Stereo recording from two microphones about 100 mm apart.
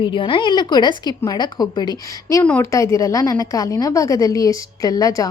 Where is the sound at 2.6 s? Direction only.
30° left (ahead or behind).